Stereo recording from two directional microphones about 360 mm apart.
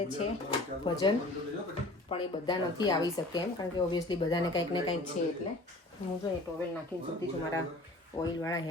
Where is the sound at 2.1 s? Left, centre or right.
Centre.